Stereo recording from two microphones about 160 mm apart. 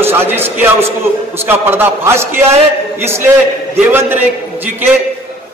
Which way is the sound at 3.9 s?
15° right (ahead or behind).